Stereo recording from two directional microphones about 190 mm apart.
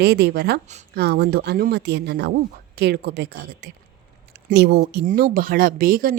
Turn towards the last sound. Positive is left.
turn(degrees=-50)  # may be behind; listen again after turning